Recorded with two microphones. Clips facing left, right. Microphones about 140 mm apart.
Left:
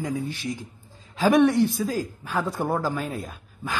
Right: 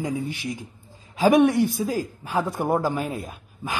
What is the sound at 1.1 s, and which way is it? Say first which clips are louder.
A man's voice: right 1 dB; 15° right (ahead or behind).